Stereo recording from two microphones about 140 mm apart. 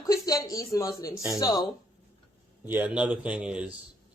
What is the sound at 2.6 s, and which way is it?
A man's voice, 15° right (ahead or behind).